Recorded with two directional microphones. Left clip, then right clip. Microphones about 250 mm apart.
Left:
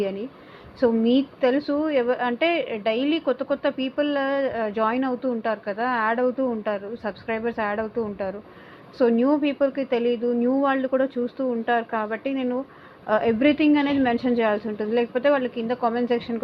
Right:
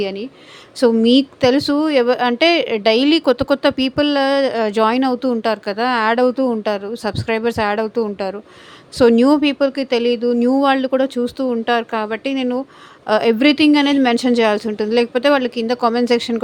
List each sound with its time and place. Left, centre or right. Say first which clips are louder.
0.0 s speech: right 5 dB; right
1.0 s speech: right 7 dB; right
7.9 s a woman's voice: right 7 dB; right
9.0 s speech: right 8 dB; right